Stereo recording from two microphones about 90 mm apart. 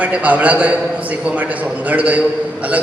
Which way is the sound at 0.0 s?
15° right (ahead or behind).